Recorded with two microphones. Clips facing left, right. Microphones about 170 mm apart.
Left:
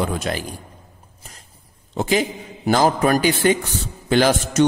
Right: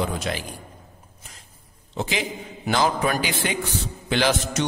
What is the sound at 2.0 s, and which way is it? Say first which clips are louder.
A man's voice: left 7 dB; 45° left (ahead or behind).